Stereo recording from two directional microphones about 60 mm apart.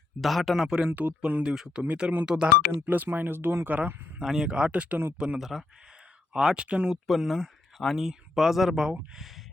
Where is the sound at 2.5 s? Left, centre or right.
Right.